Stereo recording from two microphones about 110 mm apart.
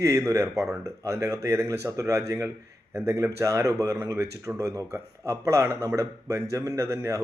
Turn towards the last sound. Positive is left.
turn(degrees=-30)  # may be behind; listen again after turning